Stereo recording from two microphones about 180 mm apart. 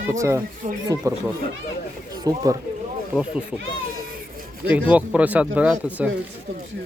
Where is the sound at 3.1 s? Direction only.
5° right (ahead or behind).